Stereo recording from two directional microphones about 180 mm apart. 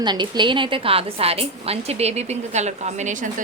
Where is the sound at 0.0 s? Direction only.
25° right (ahead or behind).